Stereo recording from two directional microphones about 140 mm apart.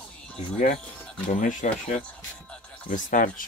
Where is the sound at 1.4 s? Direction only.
65° left (ahead or behind).